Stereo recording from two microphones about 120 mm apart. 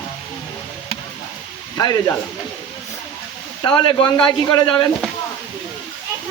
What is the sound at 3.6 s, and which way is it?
Speech, 45° left (ahead or behind).